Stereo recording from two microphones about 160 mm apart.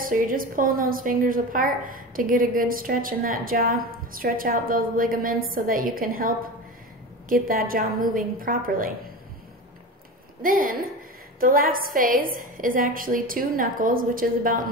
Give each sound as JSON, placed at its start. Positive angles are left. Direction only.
{"t": 0.0, "sound": "a woman's voice", "side_deg": -60}
{"t": 10.4, "sound": "a woman's voice", "side_deg": -60}